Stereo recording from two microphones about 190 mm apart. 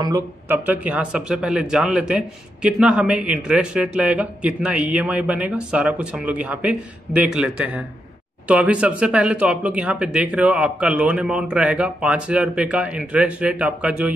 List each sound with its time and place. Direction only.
0.0 s speech: 15° right (ahead or behind)